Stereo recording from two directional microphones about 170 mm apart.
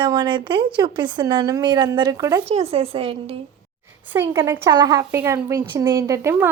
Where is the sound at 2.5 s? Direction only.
35° right (ahead or behind).